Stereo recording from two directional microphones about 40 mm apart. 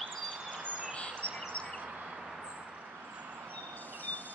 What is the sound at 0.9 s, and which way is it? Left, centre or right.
Bird, left.